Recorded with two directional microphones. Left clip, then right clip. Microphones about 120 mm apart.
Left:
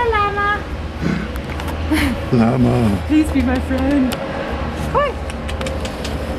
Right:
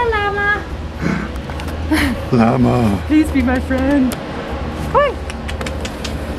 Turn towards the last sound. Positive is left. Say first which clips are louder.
# right 3 dB
turn(degrees=-30)  # may be behind; listen again after turning